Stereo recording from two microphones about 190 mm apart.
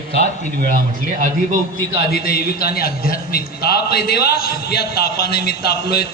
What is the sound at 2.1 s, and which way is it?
A man's voice, 50° left (ahead or behind).